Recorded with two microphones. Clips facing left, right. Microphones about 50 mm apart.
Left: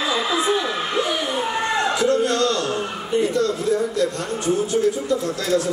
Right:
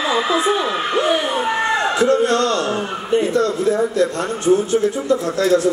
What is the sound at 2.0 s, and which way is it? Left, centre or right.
A man's voice, right.